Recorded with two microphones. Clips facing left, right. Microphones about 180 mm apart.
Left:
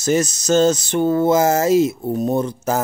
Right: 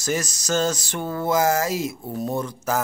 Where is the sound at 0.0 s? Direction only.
25° left (ahead or behind).